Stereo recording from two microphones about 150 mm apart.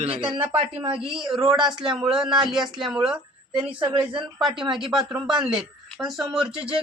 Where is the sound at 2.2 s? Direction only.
5° right (ahead or behind).